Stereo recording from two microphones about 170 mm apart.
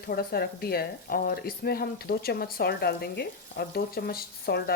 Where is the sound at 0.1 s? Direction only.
65° left (ahead or behind).